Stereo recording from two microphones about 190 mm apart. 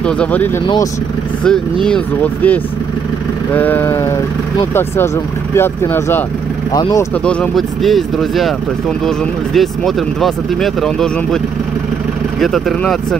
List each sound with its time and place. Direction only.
0.0 s speech: 5° left (ahead or behind)
7.2 s speech: 5° left (ahead or behind)
12.4 s speech: centre (ahead or behind)